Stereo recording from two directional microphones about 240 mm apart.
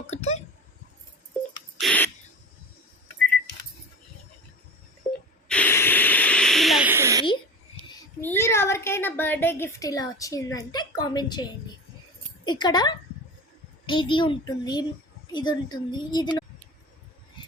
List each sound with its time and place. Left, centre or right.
0.1 s a child's voice: left
1.8 s a sound: centre
5.5 s hiss: centre
8.2 s a woman's voice: centre
12.5 s a woman's voice: centre
17.4 s vehicle: centre